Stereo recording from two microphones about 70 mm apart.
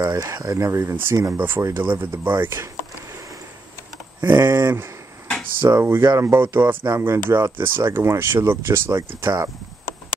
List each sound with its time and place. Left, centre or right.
0.3 s speech: right
4.2 s speech: right